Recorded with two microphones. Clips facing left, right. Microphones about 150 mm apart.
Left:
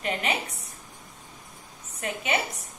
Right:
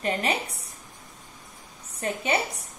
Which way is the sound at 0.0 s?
35° right (ahead or behind).